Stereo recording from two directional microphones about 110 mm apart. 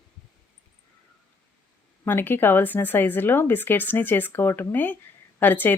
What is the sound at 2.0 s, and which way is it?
Speech, 20° left (ahead or behind).